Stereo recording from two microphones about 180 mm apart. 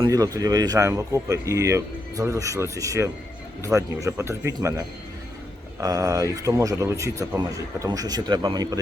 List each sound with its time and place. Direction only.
0.0 s speech: 20° right (ahead or behind)
5.8 s speech: 20° right (ahead or behind)